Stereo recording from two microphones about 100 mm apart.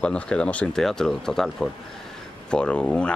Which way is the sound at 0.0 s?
10° left (ahead or behind).